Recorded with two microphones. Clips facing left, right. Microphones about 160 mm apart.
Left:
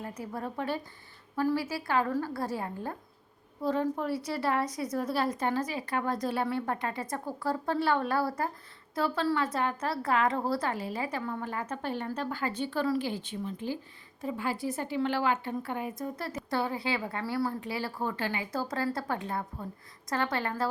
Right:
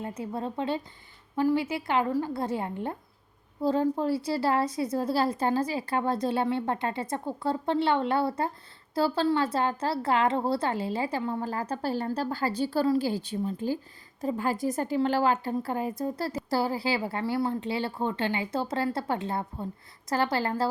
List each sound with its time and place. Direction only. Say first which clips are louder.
0.0 s a woman's voice: right 4 dB; 25° right (ahead or behind)